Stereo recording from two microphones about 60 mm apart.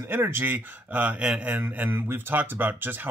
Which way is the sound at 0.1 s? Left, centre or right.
Right.